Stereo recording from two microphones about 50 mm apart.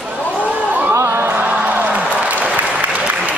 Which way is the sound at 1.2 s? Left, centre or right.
Right.